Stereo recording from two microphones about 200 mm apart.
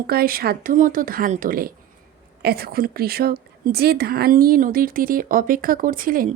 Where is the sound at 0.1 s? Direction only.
50° right (ahead or behind).